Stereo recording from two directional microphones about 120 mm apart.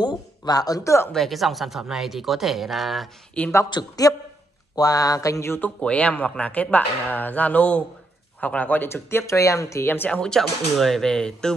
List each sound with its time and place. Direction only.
0.0 s speech: 35° left (ahead or behind)
1.1 s speech: centre (ahead or behind)
3.4 s speech: 10° left (ahead or behind)
3.7 s speech: 30° left (ahead or behind); by 11.5 s 5° left (ahead or behind)